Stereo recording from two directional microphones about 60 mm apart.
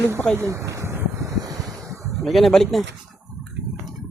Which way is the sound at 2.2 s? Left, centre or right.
Centre.